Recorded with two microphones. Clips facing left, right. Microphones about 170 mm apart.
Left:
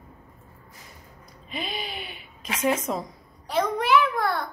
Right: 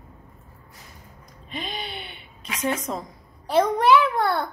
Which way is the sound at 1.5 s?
5° left (ahead or behind).